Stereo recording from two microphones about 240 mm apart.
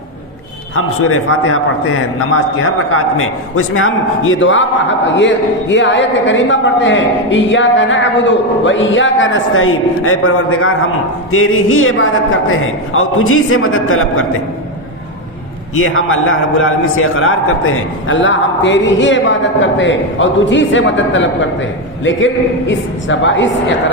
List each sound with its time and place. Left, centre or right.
0.8 s a man's voice: left
15.7 s a man's voice: left